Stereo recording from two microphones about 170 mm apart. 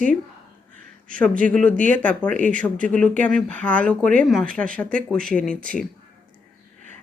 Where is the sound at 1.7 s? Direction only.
50° right (ahead or behind).